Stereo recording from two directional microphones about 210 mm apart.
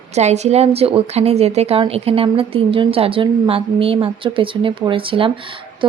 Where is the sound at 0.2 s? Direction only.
30° right (ahead or behind).